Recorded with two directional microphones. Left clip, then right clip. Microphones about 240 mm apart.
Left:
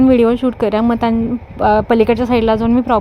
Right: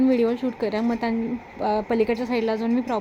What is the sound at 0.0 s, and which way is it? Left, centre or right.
Speech, left.